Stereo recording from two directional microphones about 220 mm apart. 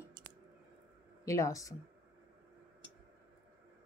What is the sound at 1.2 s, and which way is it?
Speech, 15° left (ahead or behind).